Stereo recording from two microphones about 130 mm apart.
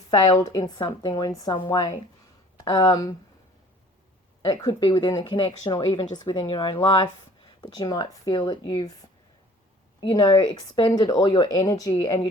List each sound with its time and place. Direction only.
0.6 s speech: 35° left (ahead or behind)
4.8 s speech: 40° left (ahead or behind)
10.0 s speech: 35° left (ahead or behind)